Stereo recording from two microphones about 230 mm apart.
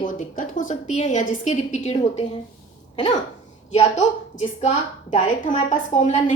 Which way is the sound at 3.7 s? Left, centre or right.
Left.